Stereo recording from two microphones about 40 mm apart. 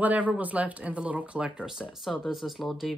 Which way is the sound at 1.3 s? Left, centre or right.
Right.